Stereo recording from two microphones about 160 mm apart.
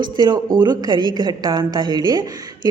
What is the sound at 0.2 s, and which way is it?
A woman's voice, 25° right (ahead or behind).